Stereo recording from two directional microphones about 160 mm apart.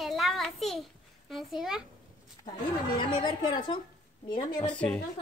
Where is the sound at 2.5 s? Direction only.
25° left (ahead or behind).